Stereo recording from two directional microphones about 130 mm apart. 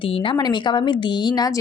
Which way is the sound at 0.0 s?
40° left (ahead or behind).